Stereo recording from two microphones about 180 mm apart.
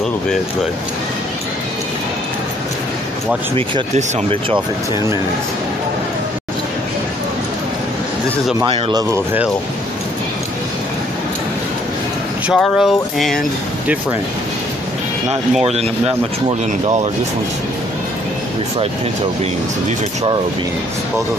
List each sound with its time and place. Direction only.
3.5 s speech: 30° right (ahead or behind)
8.6 s speech: 30° right (ahead or behind)
9.1 s speech: 10° right (ahead or behind)
12.5 s music: centre (ahead or behind)
15.6 s speech: 35° right (ahead or behind)